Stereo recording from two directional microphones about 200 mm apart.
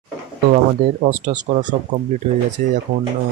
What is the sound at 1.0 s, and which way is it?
Speech, 35° right (ahead or behind).